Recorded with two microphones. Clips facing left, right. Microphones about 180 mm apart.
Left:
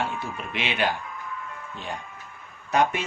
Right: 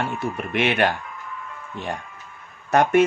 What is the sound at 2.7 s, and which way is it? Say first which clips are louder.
Speech: right 6 dB; 50° right (ahead or behind).